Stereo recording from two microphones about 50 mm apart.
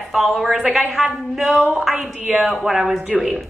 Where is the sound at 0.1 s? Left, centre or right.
Centre.